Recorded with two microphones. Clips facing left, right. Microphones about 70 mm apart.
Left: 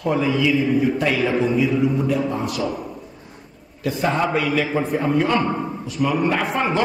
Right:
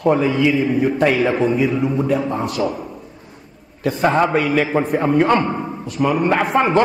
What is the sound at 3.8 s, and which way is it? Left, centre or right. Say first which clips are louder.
A man's voice: right 4 dB; right.